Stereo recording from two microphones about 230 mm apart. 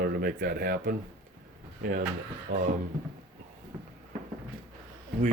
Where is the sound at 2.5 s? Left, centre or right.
Right.